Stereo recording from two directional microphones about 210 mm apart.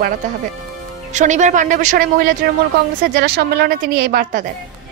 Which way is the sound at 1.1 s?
35° right (ahead or behind).